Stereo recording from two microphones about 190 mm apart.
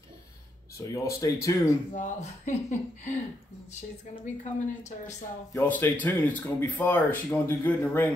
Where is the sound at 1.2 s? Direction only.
15° left (ahead or behind).